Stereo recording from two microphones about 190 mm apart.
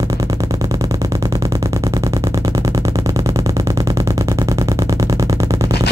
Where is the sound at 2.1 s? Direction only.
15° right (ahead or behind).